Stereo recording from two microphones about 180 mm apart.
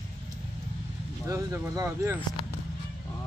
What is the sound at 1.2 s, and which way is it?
Speech, 15° right (ahead or behind).